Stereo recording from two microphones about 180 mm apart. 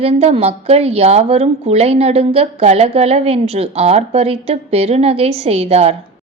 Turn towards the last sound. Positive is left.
turn(degrees=-35)  # may be behind; listen again after turning